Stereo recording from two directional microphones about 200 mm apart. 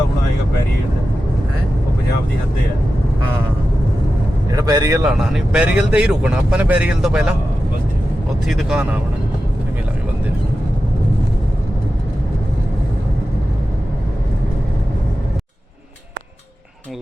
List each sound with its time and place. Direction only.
4.5 s speech: 20° right (ahead or behind)
5.0 s speech: 5° right (ahead or behind)
8.4 s speech: 5° right (ahead or behind)